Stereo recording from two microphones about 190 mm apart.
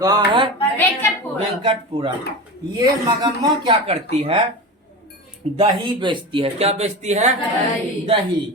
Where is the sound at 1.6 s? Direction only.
25° right (ahead or behind).